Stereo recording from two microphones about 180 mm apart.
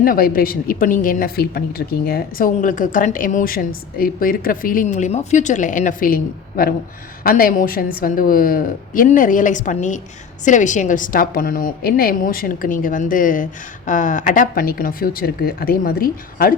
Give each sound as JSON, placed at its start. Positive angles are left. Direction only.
{"t": 0.0, "sound": "a woman's voice", "side_deg": 55}